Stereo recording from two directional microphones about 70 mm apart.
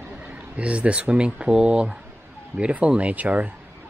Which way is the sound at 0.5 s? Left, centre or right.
Centre.